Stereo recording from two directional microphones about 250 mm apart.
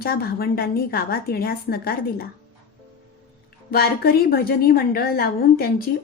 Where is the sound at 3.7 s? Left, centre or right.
Left.